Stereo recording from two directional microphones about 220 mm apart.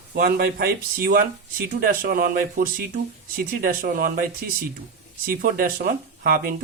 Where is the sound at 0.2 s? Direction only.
45° right (ahead or behind).